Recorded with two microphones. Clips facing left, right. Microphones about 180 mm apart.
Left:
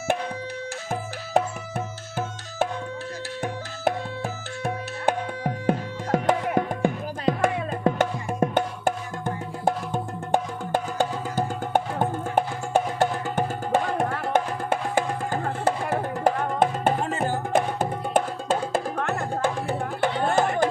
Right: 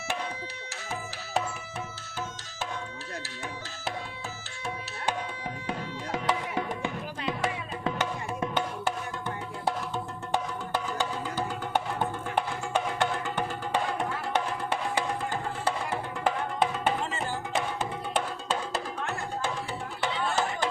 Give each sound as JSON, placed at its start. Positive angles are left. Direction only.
{"t": 0.9, "sound": "music", "side_deg": 50}
{"t": 4.6, "sound": "tabla", "side_deg": 50}